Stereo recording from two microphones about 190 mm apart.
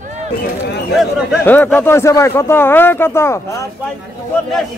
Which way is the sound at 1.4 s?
10° left (ahead or behind).